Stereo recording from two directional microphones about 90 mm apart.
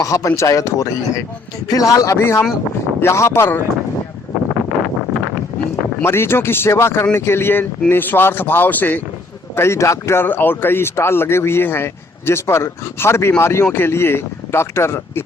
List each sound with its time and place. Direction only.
0.0 s a man's voice: 35° left (ahead or behind)
6.0 s speech: 25° left (ahead or behind)
9.6 s speech: 30° left (ahead or behind)